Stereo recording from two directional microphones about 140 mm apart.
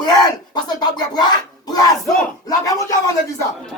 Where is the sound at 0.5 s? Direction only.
30° left (ahead or behind).